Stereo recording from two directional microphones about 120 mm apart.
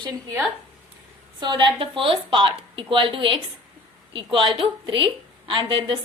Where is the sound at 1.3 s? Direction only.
40° right (ahead or behind).